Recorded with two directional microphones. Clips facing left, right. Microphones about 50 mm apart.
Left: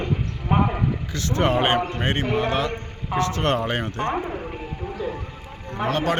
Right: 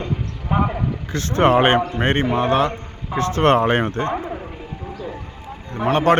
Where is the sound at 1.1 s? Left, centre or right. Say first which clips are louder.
Right 7 dB; right.